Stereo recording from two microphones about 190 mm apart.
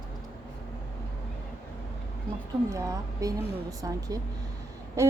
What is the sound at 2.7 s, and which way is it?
A woman's voice, 20° right (ahead or behind).